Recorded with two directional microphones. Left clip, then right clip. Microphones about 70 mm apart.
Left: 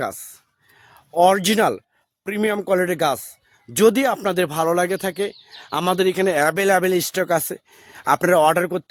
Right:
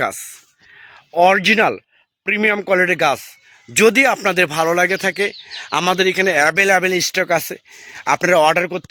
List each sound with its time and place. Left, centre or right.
1.1 s speech: left
2.2 s speech: centre
3.0 s speech: centre
4.5 s speech: left
4.9 s speech: centre
5.7 s speech: centre
6.0 s speech: left
8.3 s speech: left